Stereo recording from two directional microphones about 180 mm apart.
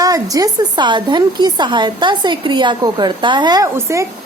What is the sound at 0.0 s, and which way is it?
A woman's voice, 20° right (ahead or behind).